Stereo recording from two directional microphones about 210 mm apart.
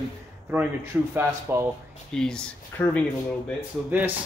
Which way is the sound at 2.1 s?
5° left (ahead or behind).